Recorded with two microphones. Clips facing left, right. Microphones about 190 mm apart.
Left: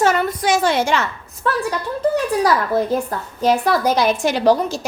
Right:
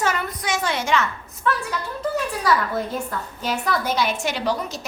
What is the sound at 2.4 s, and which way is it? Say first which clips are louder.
A woman's voice: left 3 dB; 40° left (ahead or behind).